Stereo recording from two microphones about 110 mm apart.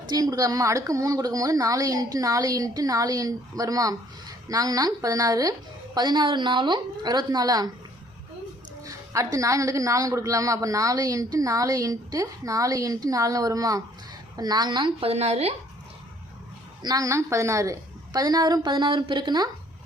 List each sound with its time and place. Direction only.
0.1 s a woman's voice: 35° right (ahead or behind)
8.8 s a woman's voice: 30° right (ahead or behind)
15.1 s a woman's voice: 75° right (ahead or behind)
16.8 s a woman's voice: 35° right (ahead or behind)